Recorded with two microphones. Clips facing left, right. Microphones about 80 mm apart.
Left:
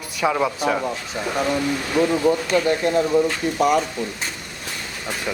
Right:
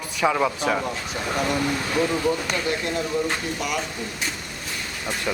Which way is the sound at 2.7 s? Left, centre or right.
Left.